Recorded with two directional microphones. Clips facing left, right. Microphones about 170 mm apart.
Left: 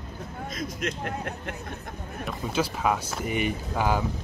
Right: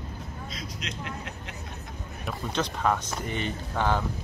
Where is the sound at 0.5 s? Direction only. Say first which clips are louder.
Left 9 dB; 50° left (ahead or behind).